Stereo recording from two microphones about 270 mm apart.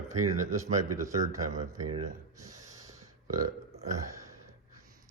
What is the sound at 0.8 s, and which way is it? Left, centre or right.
Speech, right.